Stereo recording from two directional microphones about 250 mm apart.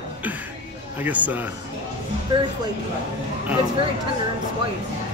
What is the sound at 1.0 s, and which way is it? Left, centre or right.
Speech, centre.